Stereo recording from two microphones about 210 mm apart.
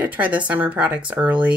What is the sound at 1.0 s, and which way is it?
Speech, 20° right (ahead or behind).